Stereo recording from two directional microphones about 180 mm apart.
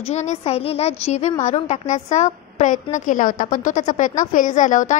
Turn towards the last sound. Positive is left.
turn(degrees=45)  # may be behind; listen again after turning